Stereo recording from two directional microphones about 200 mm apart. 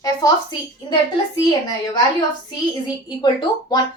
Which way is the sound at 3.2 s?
20° left (ahead or behind).